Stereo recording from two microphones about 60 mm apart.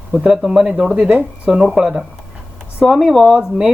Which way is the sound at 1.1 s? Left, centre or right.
Right.